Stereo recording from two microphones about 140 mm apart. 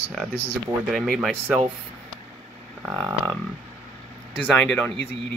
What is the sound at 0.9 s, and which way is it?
Speech, centre (ahead or behind).